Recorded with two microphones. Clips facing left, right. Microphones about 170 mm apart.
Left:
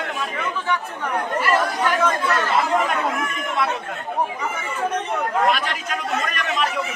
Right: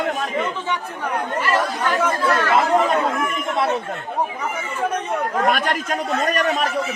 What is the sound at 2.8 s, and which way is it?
Speech, 30° right (ahead or behind).